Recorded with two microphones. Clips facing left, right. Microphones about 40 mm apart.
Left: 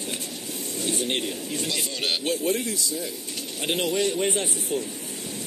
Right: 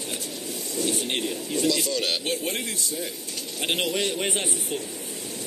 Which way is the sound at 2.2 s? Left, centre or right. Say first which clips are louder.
Left 3 dB; right.